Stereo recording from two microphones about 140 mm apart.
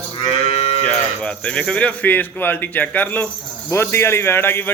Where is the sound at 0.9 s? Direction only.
5° left (ahead or behind).